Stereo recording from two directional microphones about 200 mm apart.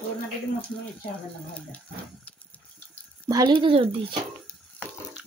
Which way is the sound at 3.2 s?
20° right (ahead or behind).